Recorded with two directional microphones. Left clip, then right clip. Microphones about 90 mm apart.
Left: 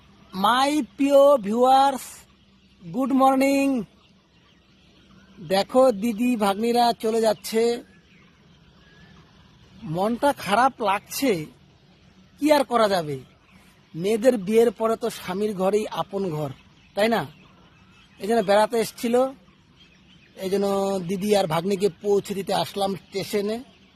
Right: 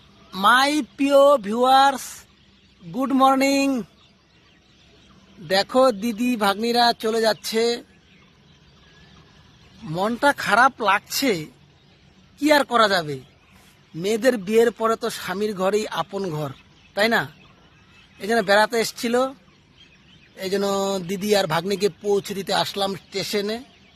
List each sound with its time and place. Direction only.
0.3 s a woman's voice: 20° left (ahead or behind)
3.2 s speech: 15° left (ahead or behind)
5.5 s speech: 10° left (ahead or behind)
9.9 s speech: 10° left (ahead or behind)
16.5 s a sound: 5° left (ahead or behind)
18.2 s speech: 10° left (ahead or behind)
20.3 s speech: 10° left (ahead or behind)